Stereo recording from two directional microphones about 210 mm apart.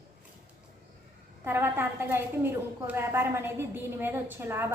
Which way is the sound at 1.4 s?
10° right (ahead or behind).